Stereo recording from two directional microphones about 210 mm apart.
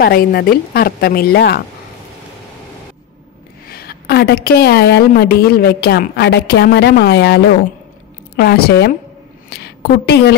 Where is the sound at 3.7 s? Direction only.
50° left (ahead or behind).